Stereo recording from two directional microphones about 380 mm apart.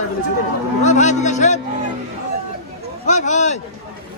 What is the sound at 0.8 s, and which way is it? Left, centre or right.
Speech, centre.